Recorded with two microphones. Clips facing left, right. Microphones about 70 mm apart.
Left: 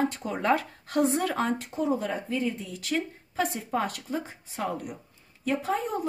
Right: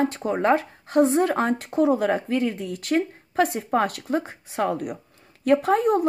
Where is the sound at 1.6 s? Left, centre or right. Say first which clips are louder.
Right 8 dB; right.